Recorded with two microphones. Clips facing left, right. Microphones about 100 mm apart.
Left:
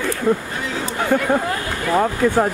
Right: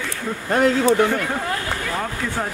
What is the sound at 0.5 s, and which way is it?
Speech, 60° right (ahead or behind).